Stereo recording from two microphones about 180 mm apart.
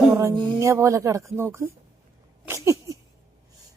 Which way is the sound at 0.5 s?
15° right (ahead or behind).